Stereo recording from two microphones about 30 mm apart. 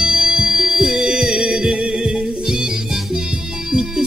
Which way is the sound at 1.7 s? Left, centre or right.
Right.